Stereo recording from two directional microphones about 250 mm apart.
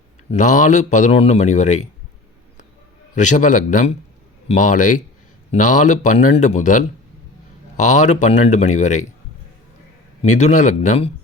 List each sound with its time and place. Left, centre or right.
0.3 s a man's voice: left
3.2 s a man's voice: left
10.2 s a man's voice: left